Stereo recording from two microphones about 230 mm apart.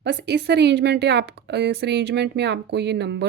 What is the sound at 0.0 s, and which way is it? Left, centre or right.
A woman's voice, right.